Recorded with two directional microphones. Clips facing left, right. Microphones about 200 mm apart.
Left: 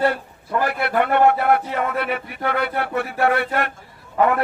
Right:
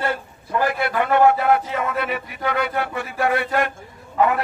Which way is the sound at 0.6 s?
60° left (ahead or behind).